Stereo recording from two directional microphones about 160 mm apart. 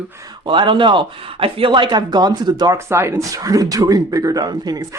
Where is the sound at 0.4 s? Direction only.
30° right (ahead or behind).